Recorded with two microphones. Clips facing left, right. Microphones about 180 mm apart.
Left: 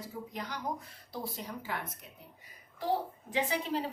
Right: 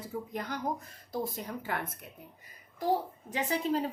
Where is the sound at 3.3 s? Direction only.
45° right (ahead or behind).